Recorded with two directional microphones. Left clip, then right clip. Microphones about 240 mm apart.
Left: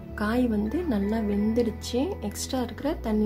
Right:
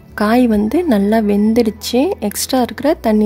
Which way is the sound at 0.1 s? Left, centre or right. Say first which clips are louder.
Right 13 dB; right.